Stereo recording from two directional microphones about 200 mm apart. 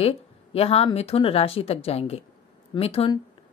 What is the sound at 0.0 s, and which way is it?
Speech, 30° left (ahead or behind).